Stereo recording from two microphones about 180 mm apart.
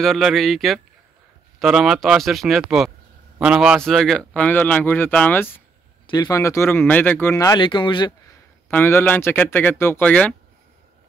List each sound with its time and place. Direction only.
0.0 s a man's voice: centre (ahead or behind)
6.0 s a man's voice: 20° left (ahead or behind)
8.6 s a man's voice: 10° left (ahead or behind)